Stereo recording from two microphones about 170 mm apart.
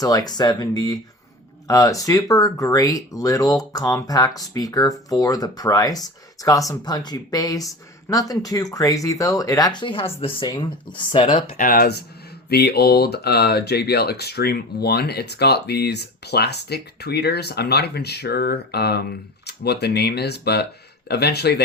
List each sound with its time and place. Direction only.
0.0 s speech: 20° left (ahead or behind)
11.5 s speech: 55° left (ahead or behind); by 21.6 s 75° left (ahead or behind)